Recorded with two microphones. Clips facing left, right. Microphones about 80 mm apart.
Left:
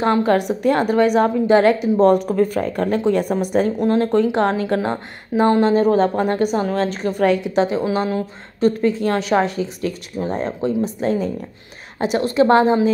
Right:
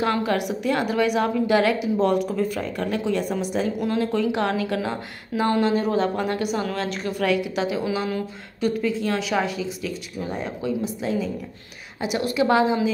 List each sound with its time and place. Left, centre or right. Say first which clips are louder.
0.0 s a woman's voice: left 6 dB; left